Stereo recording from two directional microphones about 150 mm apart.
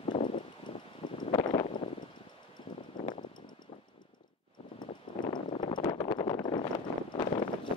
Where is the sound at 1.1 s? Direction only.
30° left (ahead or behind).